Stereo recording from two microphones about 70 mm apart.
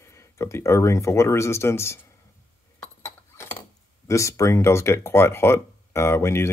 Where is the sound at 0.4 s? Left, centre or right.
Left.